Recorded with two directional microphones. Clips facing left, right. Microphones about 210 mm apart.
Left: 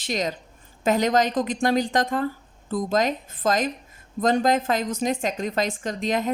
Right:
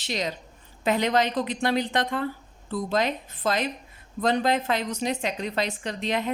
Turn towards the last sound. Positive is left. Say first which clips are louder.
# left 3 dB
turn(degrees=45)  # may be behind; listen again after turning